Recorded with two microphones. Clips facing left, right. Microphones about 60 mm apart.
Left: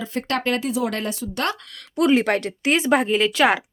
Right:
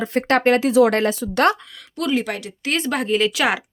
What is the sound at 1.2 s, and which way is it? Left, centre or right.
Speech, right.